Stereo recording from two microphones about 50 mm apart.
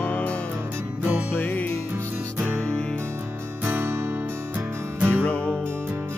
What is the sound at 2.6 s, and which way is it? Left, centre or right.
Music, centre.